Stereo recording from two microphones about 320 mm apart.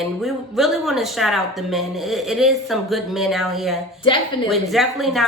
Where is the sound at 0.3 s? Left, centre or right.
Centre.